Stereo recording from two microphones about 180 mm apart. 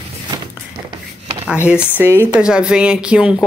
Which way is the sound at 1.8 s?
10° right (ahead or behind).